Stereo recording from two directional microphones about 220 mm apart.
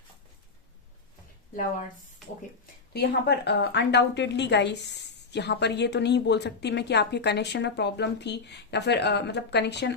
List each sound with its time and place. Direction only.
2.9 s a woman's voice: 45° left (ahead or behind)